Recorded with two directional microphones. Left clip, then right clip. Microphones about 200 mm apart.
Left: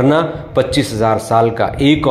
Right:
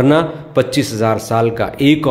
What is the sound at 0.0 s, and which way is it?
A man's voice, 15° right (ahead or behind).